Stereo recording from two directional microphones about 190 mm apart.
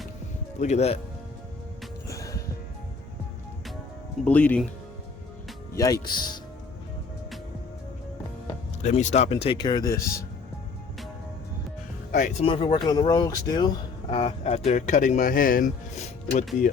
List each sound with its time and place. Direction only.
0.6 s speech: 35° left (ahead or behind)
2.0 s music: 15° left (ahead or behind)
4.3 s speech: 5° left (ahead or behind)
5.7 s speech: 15° left (ahead or behind)
8.8 s speech: 40° left (ahead or behind); by 10.2 s 15° left (ahead or behind)
12.1 s speech: 35° left (ahead or behind)